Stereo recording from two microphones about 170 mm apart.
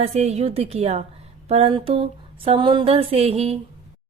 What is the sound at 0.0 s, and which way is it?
Speech, 40° right (ahead or behind).